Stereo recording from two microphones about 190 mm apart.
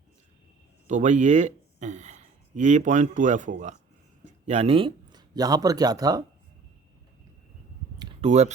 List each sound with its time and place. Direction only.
0.9 s speech: 40° right (ahead or behind); by 6.2 s 20° right (ahead or behind)
8.2 s speech: 35° right (ahead or behind)